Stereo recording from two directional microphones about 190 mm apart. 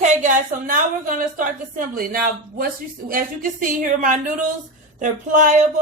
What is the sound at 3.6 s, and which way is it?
A woman's voice, 45° right (ahead or behind).